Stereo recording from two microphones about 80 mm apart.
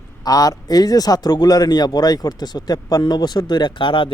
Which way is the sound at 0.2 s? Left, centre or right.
Left.